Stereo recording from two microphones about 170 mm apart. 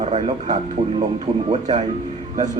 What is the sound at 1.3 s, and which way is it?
Speech, 25° right (ahead or behind).